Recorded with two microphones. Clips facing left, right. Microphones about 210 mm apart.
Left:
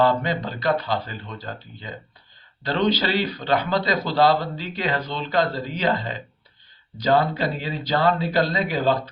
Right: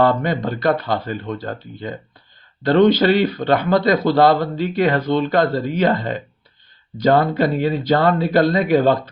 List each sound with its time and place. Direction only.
0.0 s speech: 55° right (ahead or behind)